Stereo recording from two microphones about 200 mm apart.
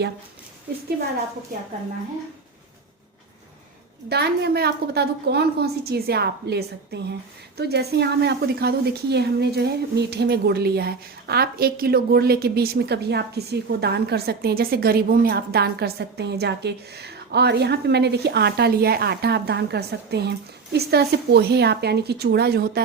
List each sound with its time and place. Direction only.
4.1 s a woman's voice: 55° right (ahead or behind)